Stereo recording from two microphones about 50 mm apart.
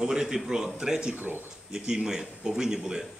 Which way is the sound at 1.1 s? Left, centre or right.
Right.